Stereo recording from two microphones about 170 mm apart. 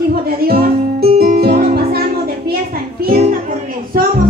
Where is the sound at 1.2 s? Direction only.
65° right (ahead or behind).